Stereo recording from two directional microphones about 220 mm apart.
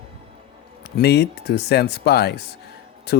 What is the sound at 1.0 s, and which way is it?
Speech, 50° left (ahead or behind).